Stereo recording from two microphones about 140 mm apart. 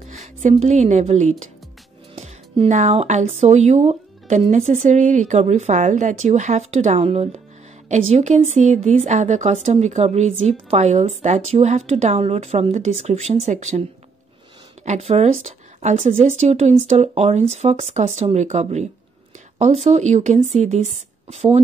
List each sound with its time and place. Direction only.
0.0 s a woman's voice: 50° right (ahead or behind)
14.9 s a woman's voice: 50° right (ahead or behind)